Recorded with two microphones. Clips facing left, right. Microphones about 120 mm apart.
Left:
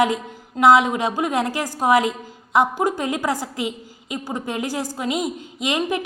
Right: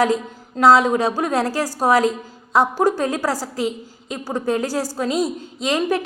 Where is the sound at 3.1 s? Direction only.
20° left (ahead or behind).